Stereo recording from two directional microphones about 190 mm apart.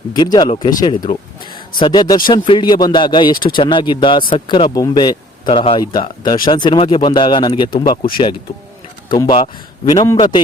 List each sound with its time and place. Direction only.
0.1 s speech: 20° left (ahead or behind)